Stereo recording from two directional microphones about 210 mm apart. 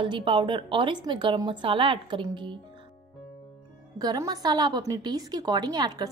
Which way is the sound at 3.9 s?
20° right (ahead or behind).